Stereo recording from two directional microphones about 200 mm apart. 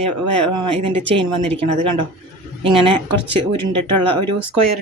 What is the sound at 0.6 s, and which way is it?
Speech, 25° right (ahead or behind).